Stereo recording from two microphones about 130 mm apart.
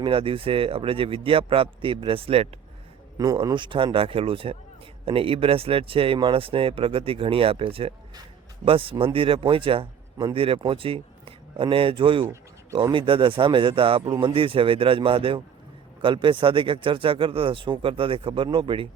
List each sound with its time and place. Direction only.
0.0 s a man's voice: 45° right (ahead or behind)
3.2 s a man's voice: 30° right (ahead or behind)